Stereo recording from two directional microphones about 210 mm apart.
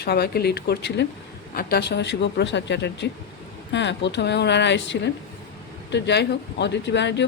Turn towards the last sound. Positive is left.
turn(degrees=55)  # may be behind; listen again after turning